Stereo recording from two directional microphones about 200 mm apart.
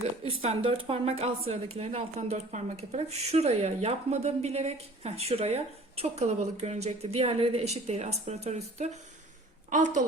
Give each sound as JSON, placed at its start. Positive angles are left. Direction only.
{"t": 0.4, "sound": "a woman's voice", "side_deg": -25}